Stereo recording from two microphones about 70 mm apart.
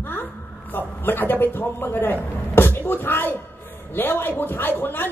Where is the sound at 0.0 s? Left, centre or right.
Left.